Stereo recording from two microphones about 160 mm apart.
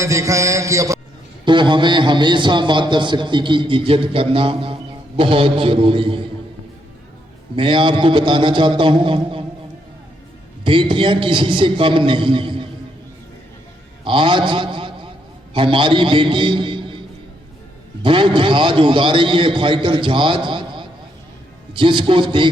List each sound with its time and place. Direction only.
0.0 s mantra: 20° right (ahead or behind)
1.5 s a man's voice: 30° right (ahead or behind)
7.5 s a man's voice: 30° right (ahead or behind)
10.6 s a man's voice: 30° right (ahead or behind)
14.0 s a man's voice: 30° right (ahead or behind)
18.0 s a man's voice: 30° right (ahead or behind)